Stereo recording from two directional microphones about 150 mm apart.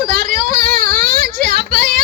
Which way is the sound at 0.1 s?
80° right.